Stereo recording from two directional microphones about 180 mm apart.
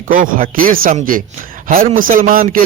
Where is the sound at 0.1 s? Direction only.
50° right (ahead or behind).